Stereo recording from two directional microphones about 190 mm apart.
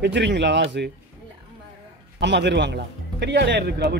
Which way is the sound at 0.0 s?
65° right (ahead or behind).